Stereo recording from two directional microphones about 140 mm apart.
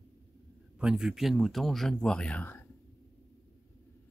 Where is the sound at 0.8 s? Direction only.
5° right (ahead or behind); by 2.6 s 10° left (ahead or behind).